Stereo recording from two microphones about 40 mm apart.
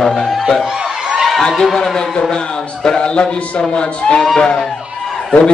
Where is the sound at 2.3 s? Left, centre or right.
Centre.